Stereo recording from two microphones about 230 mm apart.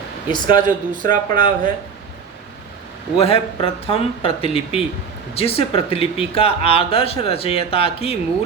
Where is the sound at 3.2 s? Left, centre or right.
Left.